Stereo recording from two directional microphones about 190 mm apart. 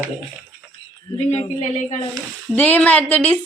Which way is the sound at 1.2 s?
35° left (ahead or behind).